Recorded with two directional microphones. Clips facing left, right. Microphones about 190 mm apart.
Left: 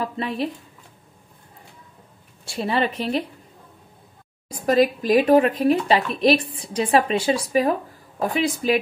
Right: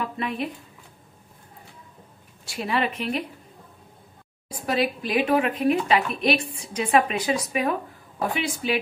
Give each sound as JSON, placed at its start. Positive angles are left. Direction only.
{"t": 0.0, "sound": "speech", "side_deg": 35}
{"t": 2.4, "sound": "speech", "side_deg": 30}
{"t": 4.5, "sound": "speech", "side_deg": 40}